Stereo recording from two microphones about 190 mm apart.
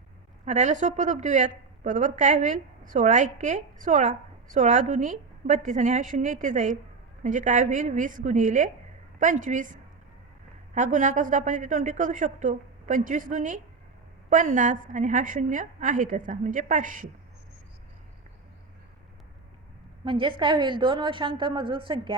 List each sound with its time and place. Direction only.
0.4 s a woman's voice: 40° right (ahead or behind)
10.8 s a woman's voice: 40° right (ahead or behind)
20.1 s a woman's voice: 25° right (ahead or behind)